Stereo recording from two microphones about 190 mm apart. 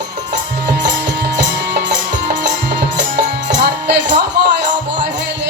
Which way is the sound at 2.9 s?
65° right (ahead or behind).